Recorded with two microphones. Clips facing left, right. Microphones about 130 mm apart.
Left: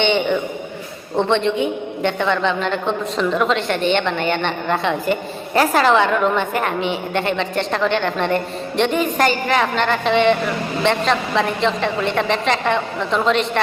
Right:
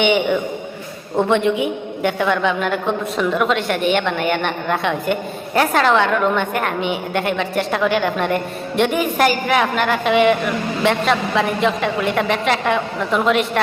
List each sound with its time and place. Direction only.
0.0 s a man's voice: 10° right (ahead or behind)